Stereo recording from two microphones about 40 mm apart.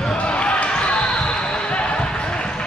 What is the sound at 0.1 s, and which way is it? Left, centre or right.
Basketball bounce, left.